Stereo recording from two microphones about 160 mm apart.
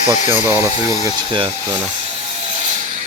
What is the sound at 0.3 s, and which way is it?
Speech, 15° right (ahead or behind).